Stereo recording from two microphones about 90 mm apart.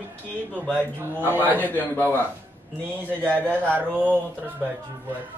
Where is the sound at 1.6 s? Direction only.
20° left (ahead or behind).